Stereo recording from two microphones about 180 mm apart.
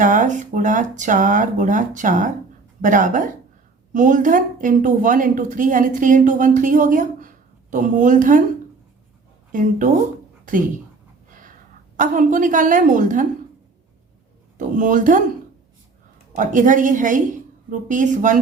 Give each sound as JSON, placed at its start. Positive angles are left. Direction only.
{"t": 0.0, "sound": "a woman's voice", "side_deg": -45}
{"t": 9.5, "sound": "a woman's voice", "side_deg": -45}
{"t": 11.9, "sound": "a woman's voice", "side_deg": -45}
{"t": 14.6, "sound": "speech", "side_deg": -45}
{"t": 16.3, "sound": "a woman's voice", "side_deg": -45}